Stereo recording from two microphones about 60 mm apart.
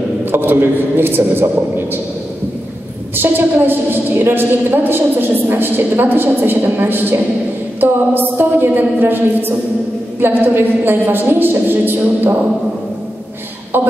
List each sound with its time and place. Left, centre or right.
0.2 s a woman's voice: right
3.2 s a woman's voice: right